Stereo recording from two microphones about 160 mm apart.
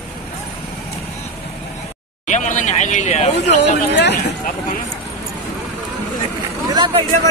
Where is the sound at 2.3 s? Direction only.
50° left (ahead or behind).